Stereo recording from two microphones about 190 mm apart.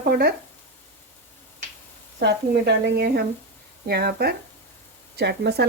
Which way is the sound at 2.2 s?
60° right (ahead or behind).